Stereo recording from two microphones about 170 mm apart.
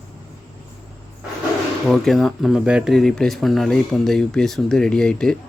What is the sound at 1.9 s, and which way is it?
Speech, centre (ahead or behind).